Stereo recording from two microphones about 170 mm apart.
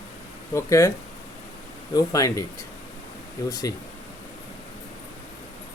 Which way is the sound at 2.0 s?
20° left (ahead or behind).